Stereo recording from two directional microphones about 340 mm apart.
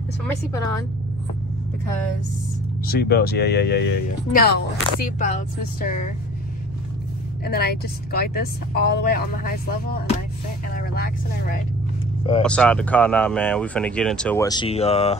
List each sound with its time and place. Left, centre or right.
0.5 s a woman's voice: centre
2.9 s speech: left
7.4 s speech: left
12.4 s speech: centre